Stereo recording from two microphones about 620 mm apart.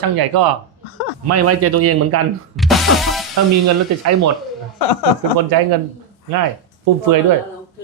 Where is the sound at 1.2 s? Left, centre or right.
Right.